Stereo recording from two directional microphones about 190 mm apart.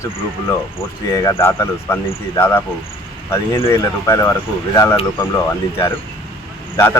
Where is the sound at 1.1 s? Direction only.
15° left (ahead or behind).